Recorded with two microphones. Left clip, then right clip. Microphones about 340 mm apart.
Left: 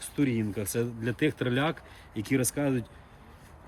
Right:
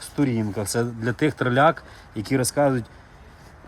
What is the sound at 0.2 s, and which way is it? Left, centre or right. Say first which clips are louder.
Speech: right 5 dB; centre.